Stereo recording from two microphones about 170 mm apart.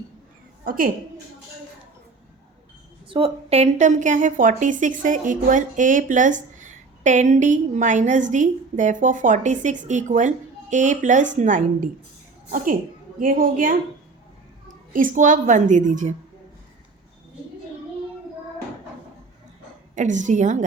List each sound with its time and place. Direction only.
0.6 s a woman's voice: 55° right (ahead or behind)
3.1 s a woman's voice: 35° right (ahead or behind); by 13.7 s 55° right (ahead or behind)
14.9 s a woman's voice: 50° right (ahead or behind)
20.0 s a woman's voice: 45° right (ahead or behind)